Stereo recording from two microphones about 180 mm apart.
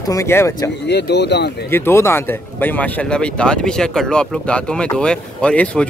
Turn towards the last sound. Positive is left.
turn(degrees=5)  # may be behind; listen again after turning